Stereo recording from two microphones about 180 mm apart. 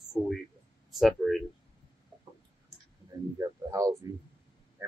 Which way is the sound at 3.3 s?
15° right (ahead or behind).